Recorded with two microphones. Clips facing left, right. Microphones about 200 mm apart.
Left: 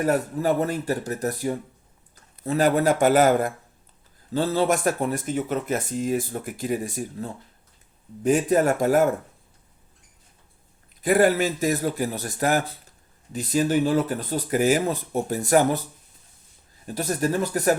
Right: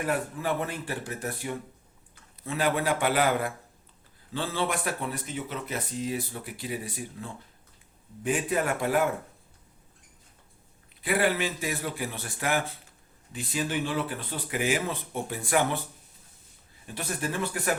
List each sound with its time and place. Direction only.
0.0 s speech: 40° left (ahead or behind)
11.0 s speech: 45° left (ahead or behind)
16.8 s speech: 40° left (ahead or behind)